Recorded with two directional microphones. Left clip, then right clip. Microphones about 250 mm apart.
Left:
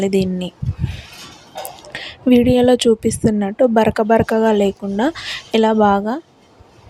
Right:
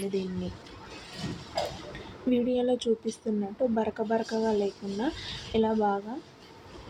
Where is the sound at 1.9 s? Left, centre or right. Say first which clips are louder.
Left 16 dB; left.